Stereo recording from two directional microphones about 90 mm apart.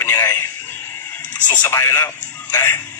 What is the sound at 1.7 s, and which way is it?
Speech, 25° left (ahead or behind).